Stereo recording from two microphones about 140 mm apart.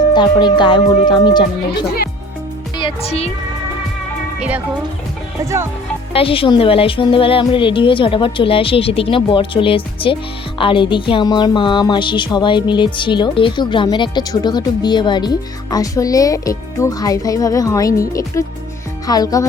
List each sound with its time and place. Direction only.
0.1 s music: 30° left (ahead or behind)
2.7 s speech: 40° left (ahead or behind)
4.4 s speech: 10° right (ahead or behind)
6.1 s music: 40° left (ahead or behind); by 18.0 s 25° left (ahead or behind)
18.1 s speech: 20° left (ahead or behind)